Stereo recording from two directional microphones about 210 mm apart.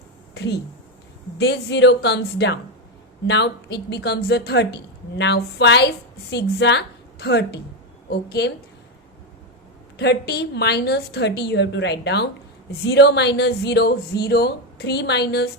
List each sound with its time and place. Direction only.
1.4 s speech: 55° left (ahead or behind)
10.0 s speech: 50° left (ahead or behind)